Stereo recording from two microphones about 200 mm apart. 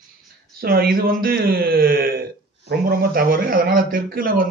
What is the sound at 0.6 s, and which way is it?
A man's voice, 50° right (ahead or behind).